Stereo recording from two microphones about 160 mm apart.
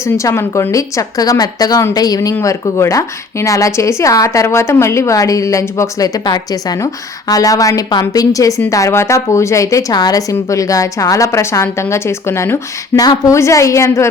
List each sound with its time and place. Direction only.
0.0 s a woman's voice: 20° left (ahead or behind)